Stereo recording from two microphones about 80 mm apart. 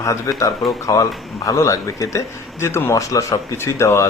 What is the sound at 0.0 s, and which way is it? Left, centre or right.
Speech, left.